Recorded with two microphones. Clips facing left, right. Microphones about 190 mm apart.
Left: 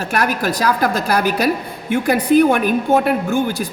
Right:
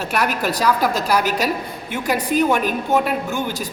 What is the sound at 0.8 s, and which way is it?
A woman's voice, 55° left (ahead or behind).